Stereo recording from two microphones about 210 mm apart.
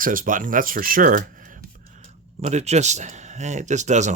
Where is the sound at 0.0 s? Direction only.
40° right (ahead or behind).